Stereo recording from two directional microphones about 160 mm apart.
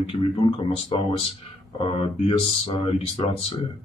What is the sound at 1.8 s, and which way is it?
Speech, 35° left (ahead or behind).